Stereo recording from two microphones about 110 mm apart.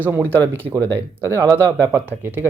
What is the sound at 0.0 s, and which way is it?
Speech, 20° right (ahead or behind).